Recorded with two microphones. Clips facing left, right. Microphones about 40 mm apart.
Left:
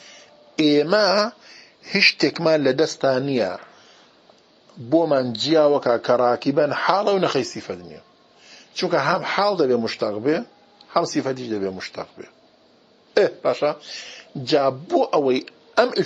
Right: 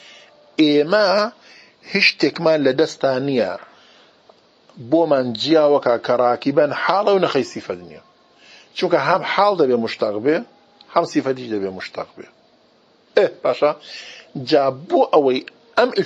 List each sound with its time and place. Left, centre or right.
0.7 s speech: centre
3.0 s speech: right
4.8 s speech: right
6.0 s speech: right
7.4 s speech: right
7.7 s speech: centre
8.5 s a sound: right
9.0 s speech: right
9.4 s speech: right
11.4 s speech: centre
11.8 s speech: right
13.4 s speech: right
13.7 s speech: centre
14.9 s speech: right